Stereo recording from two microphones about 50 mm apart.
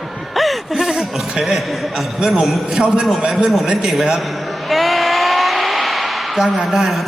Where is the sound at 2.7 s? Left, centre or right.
Centre.